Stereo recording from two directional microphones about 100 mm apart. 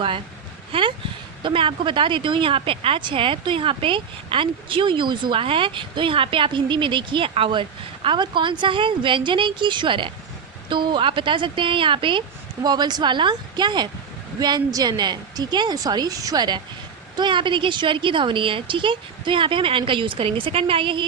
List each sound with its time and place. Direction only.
0.7 s speech: 55° right (ahead or behind)
8.0 s speech: 50° right (ahead or behind)
12.6 s a woman's voice: 45° right (ahead or behind)
17.2 s speech: 55° right (ahead or behind)